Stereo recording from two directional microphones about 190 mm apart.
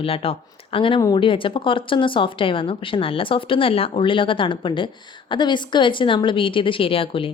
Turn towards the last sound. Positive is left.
turn(degrees=30)  # may be behind; listen again after turning